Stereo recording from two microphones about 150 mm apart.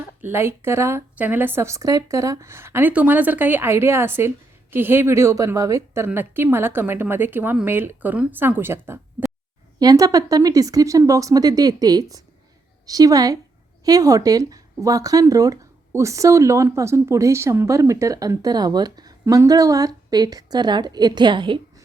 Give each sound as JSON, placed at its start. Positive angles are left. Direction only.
{"t": 0.2, "sound": "a woman's voice", "side_deg": -15}